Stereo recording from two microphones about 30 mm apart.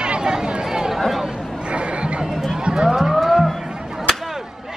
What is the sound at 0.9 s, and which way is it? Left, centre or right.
Chatter, centre.